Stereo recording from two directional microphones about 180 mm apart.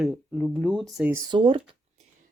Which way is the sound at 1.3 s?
30° right (ahead or behind).